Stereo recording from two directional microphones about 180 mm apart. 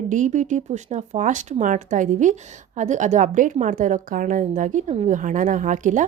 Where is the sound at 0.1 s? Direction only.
45° right (ahead or behind).